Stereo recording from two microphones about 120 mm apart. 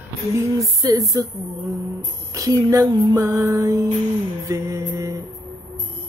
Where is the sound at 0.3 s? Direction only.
30° right (ahead or behind).